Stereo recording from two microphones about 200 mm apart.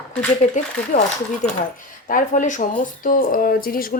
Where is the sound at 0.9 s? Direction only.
35° left (ahead or behind).